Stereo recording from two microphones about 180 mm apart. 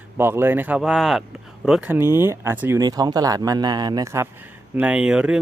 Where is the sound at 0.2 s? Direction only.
15° right (ahead or behind).